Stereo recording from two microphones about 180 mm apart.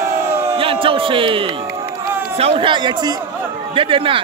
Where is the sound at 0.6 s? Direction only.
30° right (ahead or behind).